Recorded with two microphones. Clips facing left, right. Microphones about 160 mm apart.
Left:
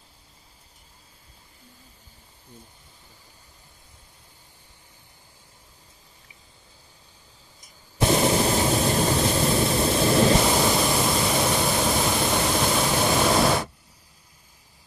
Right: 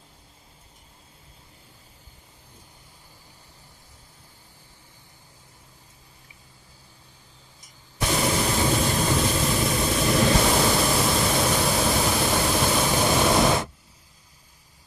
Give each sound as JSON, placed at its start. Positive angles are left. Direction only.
{"t": 8.0, "sound": "vehicle", "side_deg": 30}
{"t": 10.4, "sound": "pink noise", "side_deg": 5}